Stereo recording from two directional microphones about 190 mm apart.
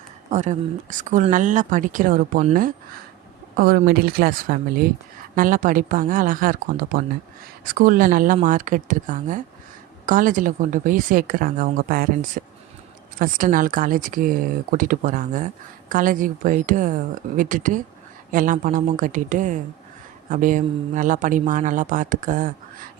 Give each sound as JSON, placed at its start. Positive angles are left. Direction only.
{"t": 0.3, "sound": "speech", "side_deg": -40}